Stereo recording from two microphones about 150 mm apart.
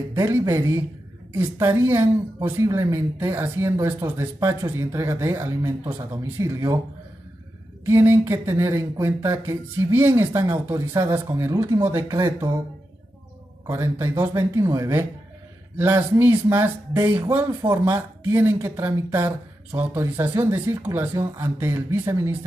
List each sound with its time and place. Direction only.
0.1 s speech: 20° right (ahead or behind)
7.8 s speech: 15° right (ahead or behind)
13.7 s speech: 20° right (ahead or behind)